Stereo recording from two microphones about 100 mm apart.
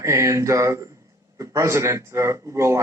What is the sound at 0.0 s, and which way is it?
Speech, 30° right (ahead or behind).